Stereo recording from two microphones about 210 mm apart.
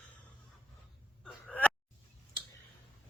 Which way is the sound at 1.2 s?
5° left (ahead or behind).